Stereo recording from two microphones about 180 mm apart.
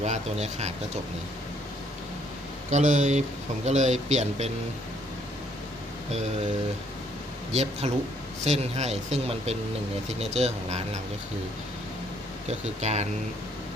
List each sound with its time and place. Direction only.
0.0 s speech: 40° right (ahead or behind)
2.6 s speech: 45° right (ahead or behind)
7.5 s speech: 35° right (ahead or behind)
12.5 s speech: 40° right (ahead or behind)